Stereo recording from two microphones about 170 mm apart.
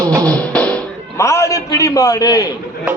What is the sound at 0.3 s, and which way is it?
Music, 5° left (ahead or behind).